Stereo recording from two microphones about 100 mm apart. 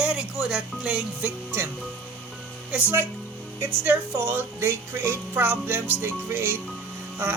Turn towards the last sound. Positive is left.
turn(degrees=-20)  # may be behind; listen again after turning